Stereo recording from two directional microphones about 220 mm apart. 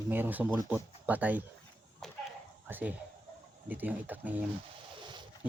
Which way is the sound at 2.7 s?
5° right (ahead or behind).